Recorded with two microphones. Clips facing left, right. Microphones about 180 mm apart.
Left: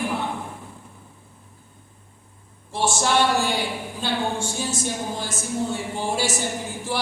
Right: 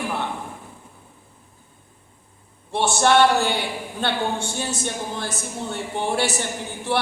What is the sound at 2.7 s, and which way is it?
A woman's voice, 65° right (ahead or behind).